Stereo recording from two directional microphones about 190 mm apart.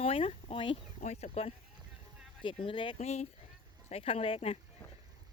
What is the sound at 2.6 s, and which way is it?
Speech, 25° left (ahead or behind).